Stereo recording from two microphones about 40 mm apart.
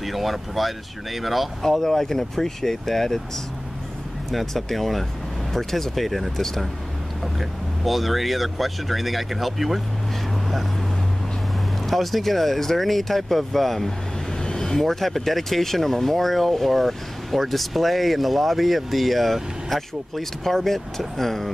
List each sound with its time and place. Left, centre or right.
0.0 s speech: centre
1.7 s speech: centre
4.3 s speech: centre
11.8 s speech: centre
14.4 s vehicle: centre
14.8 s speech: centre